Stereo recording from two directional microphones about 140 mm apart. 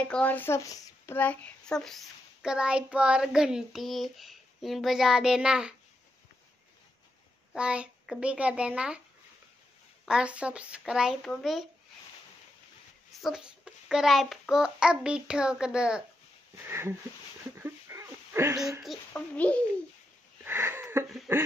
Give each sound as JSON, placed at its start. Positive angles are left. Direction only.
{"t": 0.0, "sound": "speech", "side_deg": 10}
{"t": 7.5, "sound": "a child's voice", "side_deg": -5}
{"t": 10.0, "sound": "speech", "side_deg": -5}
{"t": 13.2, "sound": "speech", "side_deg": -5}
{"t": 16.6, "sound": "a child's voice", "side_deg": -15}
{"t": 17.6, "sound": "a sound", "side_deg": -20}
{"t": 19.1, "sound": "a child's voice", "side_deg": 10}
{"t": 20.4, "sound": "a sound", "side_deg": -15}
{"t": 21.3, "sound": "a child's voice", "side_deg": -15}